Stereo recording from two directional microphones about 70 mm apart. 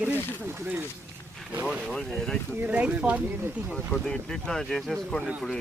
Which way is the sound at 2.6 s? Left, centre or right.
Centre.